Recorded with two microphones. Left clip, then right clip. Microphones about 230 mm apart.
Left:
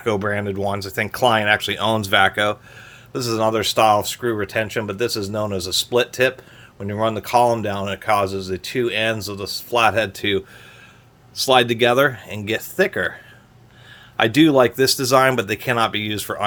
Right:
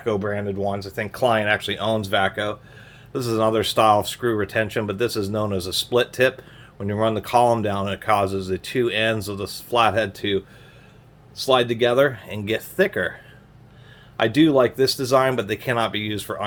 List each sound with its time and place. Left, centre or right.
0.0 s speech: left
3.1 s speech: centre
14.2 s speech: left